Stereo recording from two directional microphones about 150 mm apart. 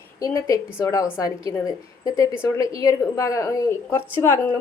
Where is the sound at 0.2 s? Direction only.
20° left (ahead or behind).